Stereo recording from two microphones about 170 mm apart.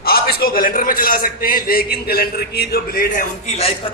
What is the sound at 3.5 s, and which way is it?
Speech, 35° left (ahead or behind).